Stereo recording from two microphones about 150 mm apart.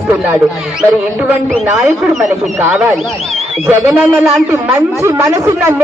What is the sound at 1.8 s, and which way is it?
A man's voice, 5° right (ahead or behind).